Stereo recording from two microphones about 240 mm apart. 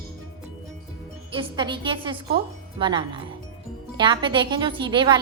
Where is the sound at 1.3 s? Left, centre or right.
Centre.